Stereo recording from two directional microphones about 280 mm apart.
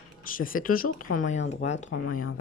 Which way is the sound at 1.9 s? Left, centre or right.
Left.